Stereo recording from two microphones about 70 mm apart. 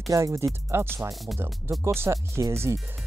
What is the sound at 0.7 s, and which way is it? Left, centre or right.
Speech, right.